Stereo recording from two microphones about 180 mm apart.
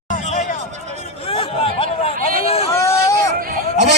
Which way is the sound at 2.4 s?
35° left (ahead or behind).